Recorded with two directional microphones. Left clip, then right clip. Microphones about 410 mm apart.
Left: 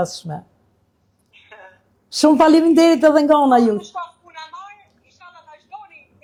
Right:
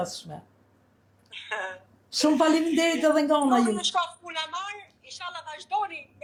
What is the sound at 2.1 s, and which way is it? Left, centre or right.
A man's voice, left.